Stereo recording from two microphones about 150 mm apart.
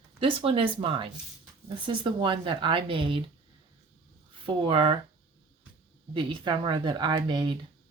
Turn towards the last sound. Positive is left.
turn(degrees=-30)  # may be behind; listen again after turning